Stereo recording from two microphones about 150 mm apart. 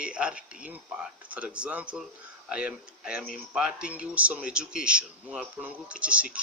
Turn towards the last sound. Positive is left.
turn(degrees=-10)  # may be behind; listen again after turning